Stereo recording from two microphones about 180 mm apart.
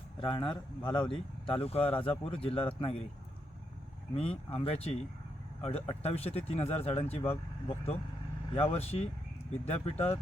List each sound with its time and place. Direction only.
0.2 s a man's voice: 25° left (ahead or behind)
4.1 s speech: 30° left (ahead or behind)